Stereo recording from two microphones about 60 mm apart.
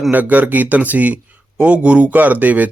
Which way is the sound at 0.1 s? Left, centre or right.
Right.